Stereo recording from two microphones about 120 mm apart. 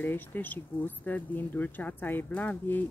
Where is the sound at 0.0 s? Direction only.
15° left (ahead or behind).